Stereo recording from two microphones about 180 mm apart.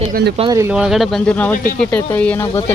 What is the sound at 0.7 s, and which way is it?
Speech, centre (ahead or behind).